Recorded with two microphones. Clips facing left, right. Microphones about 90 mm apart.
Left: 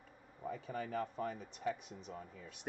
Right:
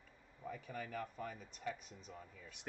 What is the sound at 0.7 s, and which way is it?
Speech, 40° left (ahead or behind).